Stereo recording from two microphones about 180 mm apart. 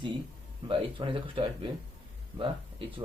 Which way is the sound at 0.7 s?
30° right (ahead or behind).